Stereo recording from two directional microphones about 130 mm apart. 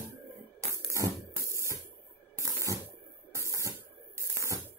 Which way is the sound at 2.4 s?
25° right (ahead or behind).